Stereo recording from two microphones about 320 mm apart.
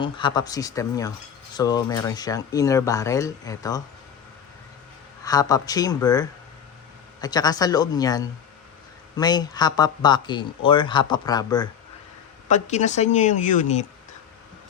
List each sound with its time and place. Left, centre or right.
0.0 s speech: centre
5.2 s speech: centre